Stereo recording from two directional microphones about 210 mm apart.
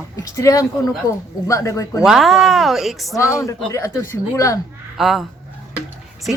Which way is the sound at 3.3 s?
15° left (ahead or behind).